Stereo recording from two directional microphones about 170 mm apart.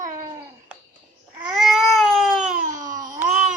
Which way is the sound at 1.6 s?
Centre (ahead or behind).